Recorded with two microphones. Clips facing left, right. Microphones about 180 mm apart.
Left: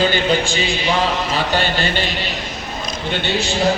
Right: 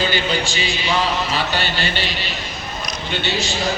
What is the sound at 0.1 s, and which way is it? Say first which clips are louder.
Speech: left 4 dB; 50° left (ahead or behind).